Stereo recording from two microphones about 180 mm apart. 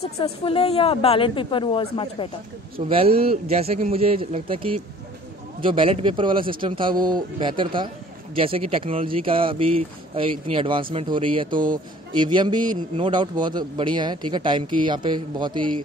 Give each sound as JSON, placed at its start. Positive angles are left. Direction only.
{"t": 0.0, "sound": "a woman's voice", "side_deg": 30}
{"t": 2.9, "sound": "a man's voice", "side_deg": -30}